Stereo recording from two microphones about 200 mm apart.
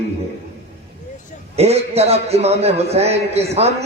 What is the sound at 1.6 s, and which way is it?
A man's voice, 30° right (ahead or behind).